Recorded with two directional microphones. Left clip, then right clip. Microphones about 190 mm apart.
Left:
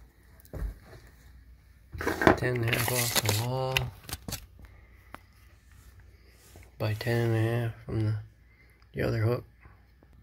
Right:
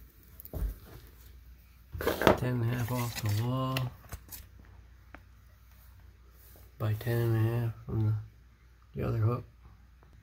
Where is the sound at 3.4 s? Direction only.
30° left (ahead or behind).